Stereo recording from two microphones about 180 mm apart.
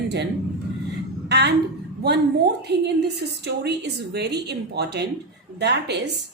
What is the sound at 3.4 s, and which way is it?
A woman's voice, 65° right (ahead or behind).